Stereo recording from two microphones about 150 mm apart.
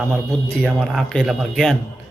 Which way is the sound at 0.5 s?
5° left (ahead or behind).